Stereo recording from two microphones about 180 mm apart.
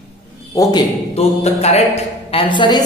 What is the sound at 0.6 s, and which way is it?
Speech, 20° left (ahead or behind).